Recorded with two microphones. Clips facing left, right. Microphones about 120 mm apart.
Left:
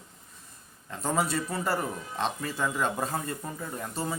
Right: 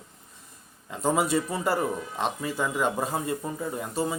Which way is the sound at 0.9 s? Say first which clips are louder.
Right 4 dB; 15° right (ahead or behind).